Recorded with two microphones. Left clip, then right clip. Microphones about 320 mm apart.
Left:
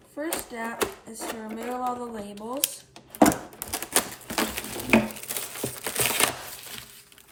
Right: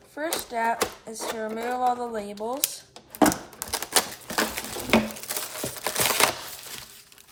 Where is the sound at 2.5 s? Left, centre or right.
Centre.